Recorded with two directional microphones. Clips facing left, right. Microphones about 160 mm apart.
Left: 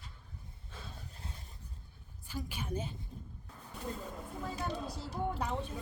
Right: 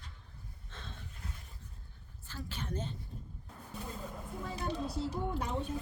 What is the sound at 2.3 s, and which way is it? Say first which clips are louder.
Speech: left 2 dB; 10° left (ahead or behind).